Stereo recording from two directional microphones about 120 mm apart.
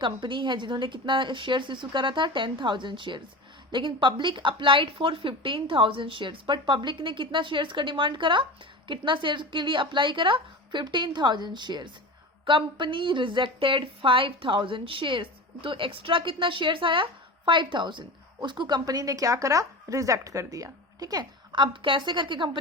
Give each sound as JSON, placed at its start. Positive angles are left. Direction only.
{"t": 0.0, "sound": "a woman's voice", "side_deg": -40}